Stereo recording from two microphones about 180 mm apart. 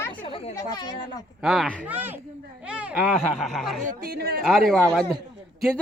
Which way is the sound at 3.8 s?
55° right (ahead or behind).